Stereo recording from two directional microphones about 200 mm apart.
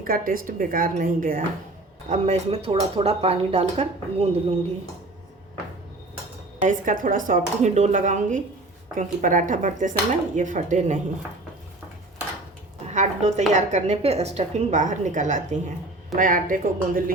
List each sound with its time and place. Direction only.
0.0 s a woman's voice: 45° right (ahead or behind)
6.6 s a woman's voice: 40° right (ahead or behind)
12.9 s a woman's voice: 35° right (ahead or behind)